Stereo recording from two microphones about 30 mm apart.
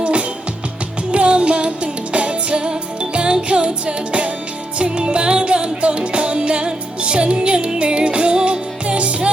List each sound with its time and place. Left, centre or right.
0.0 s music: right
9.0 s music: right